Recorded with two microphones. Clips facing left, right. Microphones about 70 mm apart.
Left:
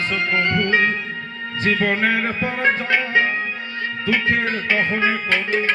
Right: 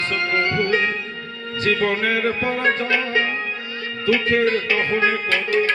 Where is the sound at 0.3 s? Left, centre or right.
Left.